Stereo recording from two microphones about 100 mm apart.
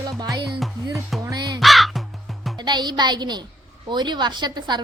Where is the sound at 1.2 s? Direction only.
35° right (ahead or behind).